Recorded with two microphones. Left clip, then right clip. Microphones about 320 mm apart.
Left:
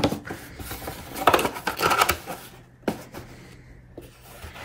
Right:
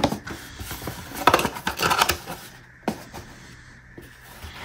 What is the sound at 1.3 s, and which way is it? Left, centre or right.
Scissors, centre.